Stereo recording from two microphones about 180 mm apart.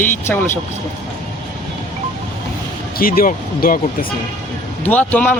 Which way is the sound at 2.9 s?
55° left (ahead or behind).